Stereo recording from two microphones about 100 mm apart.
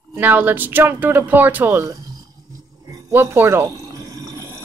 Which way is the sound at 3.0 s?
25° right (ahead or behind).